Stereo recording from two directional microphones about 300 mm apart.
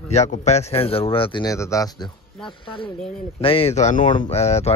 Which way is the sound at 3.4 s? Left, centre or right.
Centre.